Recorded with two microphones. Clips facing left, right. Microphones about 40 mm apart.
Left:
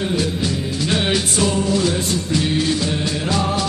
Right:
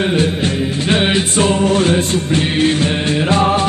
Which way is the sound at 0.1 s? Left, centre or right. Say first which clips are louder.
Right 5 dB; right.